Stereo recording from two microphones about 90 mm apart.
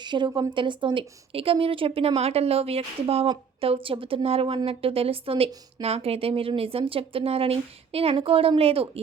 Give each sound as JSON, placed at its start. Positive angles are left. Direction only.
{"t": 0.0, "sound": "a woman's voice", "side_deg": -55}